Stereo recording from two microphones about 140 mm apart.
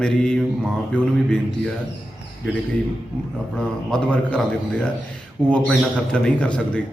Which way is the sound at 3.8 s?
5° left (ahead or behind).